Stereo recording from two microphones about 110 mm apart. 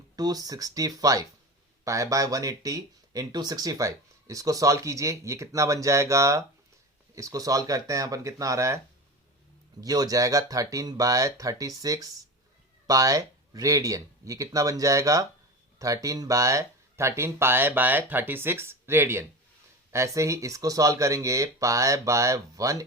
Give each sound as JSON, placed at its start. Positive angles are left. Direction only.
{"t": 0.2, "sound": "speech", "side_deg": -35}
{"t": 9.8, "sound": "speech", "side_deg": -35}